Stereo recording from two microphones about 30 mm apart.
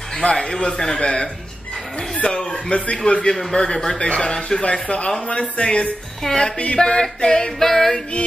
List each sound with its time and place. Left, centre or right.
0.2 s speech: left
3.7 s female singing: centre
4.1 s speech: left
4.5 s speech: left
6.2 s speech: left
7.5 s female singing: centre